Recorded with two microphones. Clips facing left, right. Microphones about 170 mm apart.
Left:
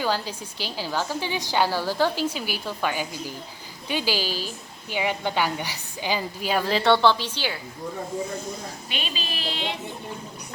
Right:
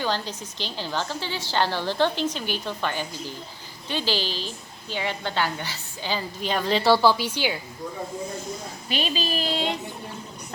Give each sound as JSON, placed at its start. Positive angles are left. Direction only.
{"t": 0.0, "sound": "a woman's voice", "side_deg": 10}
{"t": 8.9, "sound": "speech", "side_deg": -40}